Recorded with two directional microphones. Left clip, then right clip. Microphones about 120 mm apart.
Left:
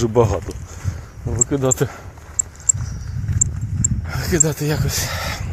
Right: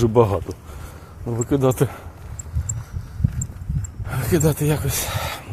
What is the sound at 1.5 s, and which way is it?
Speech, 35° right (ahead or behind).